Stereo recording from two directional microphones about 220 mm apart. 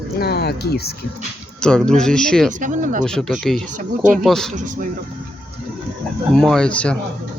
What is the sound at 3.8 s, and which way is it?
Speech, 35° right (ahead or behind).